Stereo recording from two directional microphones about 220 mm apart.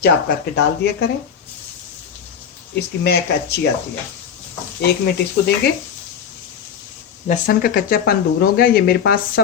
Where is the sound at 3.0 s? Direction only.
50° left (ahead or behind).